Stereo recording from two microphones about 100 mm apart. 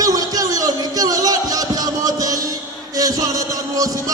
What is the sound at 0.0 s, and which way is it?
Music, 35° right (ahead or behind).